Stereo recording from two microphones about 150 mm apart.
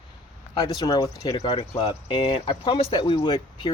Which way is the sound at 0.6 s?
25° left (ahead or behind).